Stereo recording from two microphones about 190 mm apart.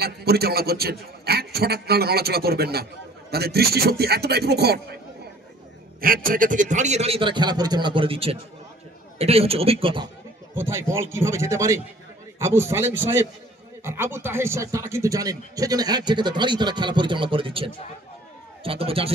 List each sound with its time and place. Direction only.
0.0 s a man's voice: 55° right (ahead or behind)
5.9 s a man's voice: 50° right (ahead or behind); by 10.0 s 30° right (ahead or behind)
10.5 s a man's voice: 15° right (ahead or behind); by 19.1 s 30° right (ahead or behind)